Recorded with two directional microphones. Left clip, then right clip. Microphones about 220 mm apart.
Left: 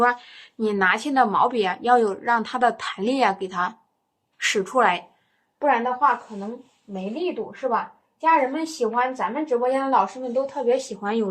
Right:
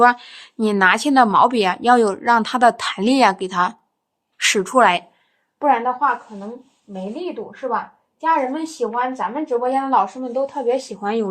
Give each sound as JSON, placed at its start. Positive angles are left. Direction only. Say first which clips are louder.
{"t": 0.0, "sound": "a woman's voice", "louder": "right 6 dB", "side_deg": -50}
{"t": 5.5, "sound": "a woman's voice", "louder": "right 3 dB", "side_deg": -30}